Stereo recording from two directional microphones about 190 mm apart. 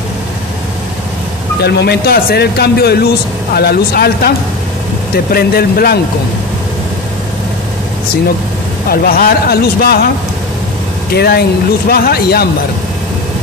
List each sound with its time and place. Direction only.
1.6 s speech: 60° left (ahead or behind)
8.8 s speech: 50° left (ahead or behind)
11.1 s speech: 55° left (ahead or behind)